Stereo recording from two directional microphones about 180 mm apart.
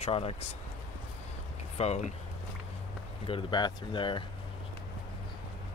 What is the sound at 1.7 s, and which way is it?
Speech, 35° left (ahead or behind).